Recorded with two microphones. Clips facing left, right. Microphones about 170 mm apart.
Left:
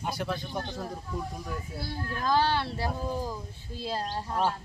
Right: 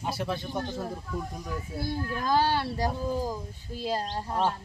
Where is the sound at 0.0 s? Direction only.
Centre (ahead or behind).